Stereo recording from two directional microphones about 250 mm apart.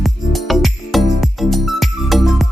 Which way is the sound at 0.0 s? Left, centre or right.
Centre.